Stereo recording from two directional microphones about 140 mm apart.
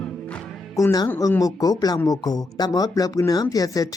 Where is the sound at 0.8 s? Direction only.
20° left (ahead or behind).